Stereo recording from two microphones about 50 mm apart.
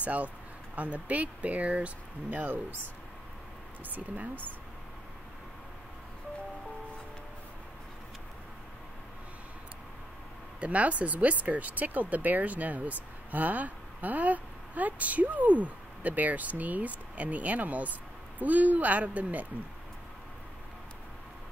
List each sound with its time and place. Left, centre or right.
0.0 s speech: right
3.9 s speech: right
10.6 s speech: right